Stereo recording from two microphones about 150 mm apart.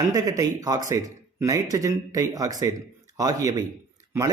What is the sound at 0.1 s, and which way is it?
Speech, 25° right (ahead or behind).